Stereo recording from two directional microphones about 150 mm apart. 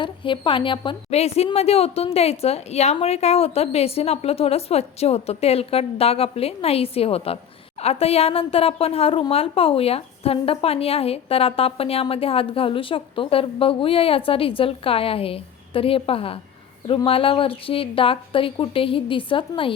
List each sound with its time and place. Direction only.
0.0 s a woman's voice: 35° left (ahead or behind)